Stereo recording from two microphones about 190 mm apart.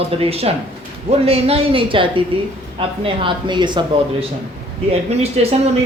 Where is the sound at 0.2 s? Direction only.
30° right (ahead or behind).